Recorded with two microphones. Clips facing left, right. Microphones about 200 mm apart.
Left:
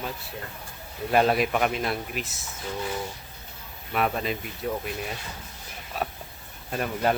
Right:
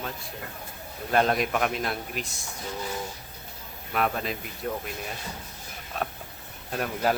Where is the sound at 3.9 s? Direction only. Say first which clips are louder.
Left 1 dB; centre (ahead or behind).